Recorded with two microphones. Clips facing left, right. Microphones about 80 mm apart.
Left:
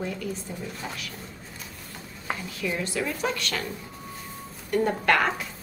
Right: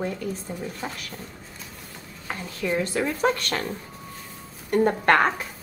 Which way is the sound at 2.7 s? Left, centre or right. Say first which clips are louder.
Right 4 dB; right.